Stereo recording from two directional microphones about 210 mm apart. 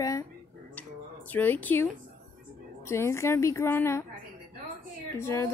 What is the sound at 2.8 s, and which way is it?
Speech, 15° left (ahead or behind).